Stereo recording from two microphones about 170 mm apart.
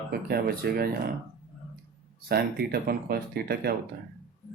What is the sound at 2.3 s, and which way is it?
Speech, 65° right (ahead or behind).